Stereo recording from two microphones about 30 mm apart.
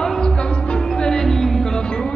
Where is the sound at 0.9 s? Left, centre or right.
Centre.